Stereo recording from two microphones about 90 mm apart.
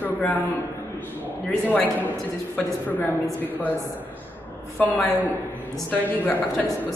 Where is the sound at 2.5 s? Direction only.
20° left (ahead or behind).